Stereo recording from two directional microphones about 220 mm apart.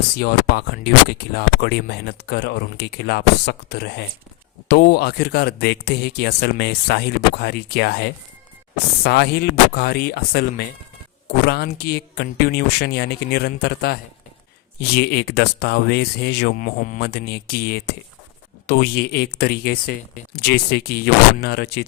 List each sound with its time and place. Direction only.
0.2 s speech: 45° left (ahead or behind)